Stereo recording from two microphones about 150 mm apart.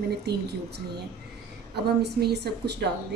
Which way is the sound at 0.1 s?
90° right.